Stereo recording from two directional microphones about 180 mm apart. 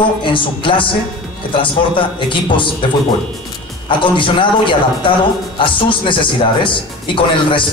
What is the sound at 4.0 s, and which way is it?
A man's voice, 30° left (ahead or behind).